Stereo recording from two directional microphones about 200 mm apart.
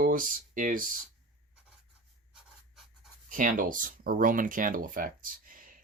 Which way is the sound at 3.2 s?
40° right (ahead or behind).